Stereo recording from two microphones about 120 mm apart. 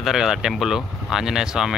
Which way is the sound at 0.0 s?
Centre (ahead or behind).